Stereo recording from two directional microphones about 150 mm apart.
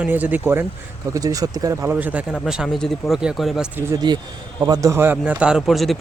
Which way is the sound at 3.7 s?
25° right (ahead or behind).